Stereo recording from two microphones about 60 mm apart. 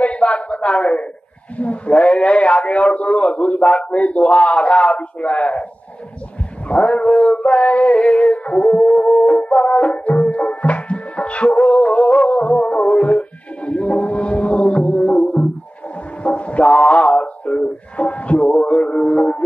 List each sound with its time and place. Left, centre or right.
0.0 s a sound: centre
1.6 s a man's voice: left
6.7 s a man's voice: centre
9.5 s music: centre
16.2 s mantra: left
18.5 s music: centre